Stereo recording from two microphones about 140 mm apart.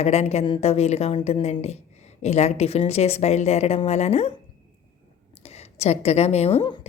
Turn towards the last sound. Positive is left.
turn(degrees=45)  # may be behind; listen again after turning